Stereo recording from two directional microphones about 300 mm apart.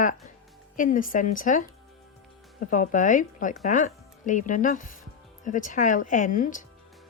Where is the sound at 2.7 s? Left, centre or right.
Left.